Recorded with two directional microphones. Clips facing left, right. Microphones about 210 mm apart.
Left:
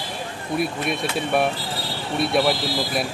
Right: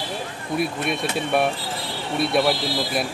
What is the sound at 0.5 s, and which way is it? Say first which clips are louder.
Speech: even; centre (ahead or behind).